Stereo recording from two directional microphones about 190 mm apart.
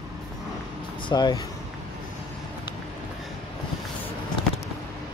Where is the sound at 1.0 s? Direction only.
20° left (ahead or behind).